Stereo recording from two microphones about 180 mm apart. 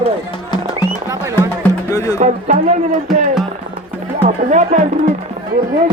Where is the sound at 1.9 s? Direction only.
20° left (ahead or behind).